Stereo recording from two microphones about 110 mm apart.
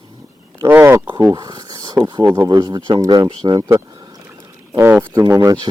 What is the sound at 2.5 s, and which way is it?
Speech, 35° right (ahead or behind).